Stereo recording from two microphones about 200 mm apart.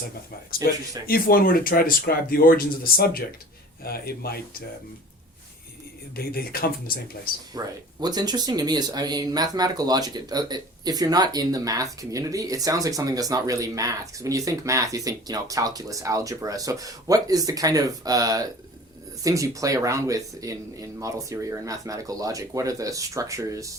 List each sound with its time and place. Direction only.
1.0 s speech: 50° left (ahead or behind)
6.1 s speech: 50° left (ahead or behind)
7.5 s speech: 20° right (ahead or behind)